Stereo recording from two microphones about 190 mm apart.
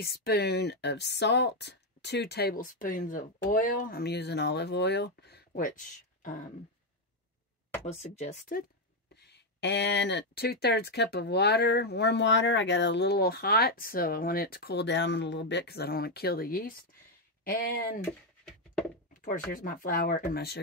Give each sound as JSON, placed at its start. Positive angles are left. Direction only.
{"t": 0.0, "sound": "speech", "side_deg": 55}
{"t": 7.8, "sound": "speech", "side_deg": 35}
{"t": 9.1, "sound": "speech", "side_deg": 60}
{"t": 19.5, "sound": "speech", "side_deg": 45}